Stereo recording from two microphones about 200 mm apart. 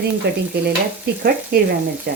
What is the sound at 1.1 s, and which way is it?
Speech, 50° right (ahead or behind).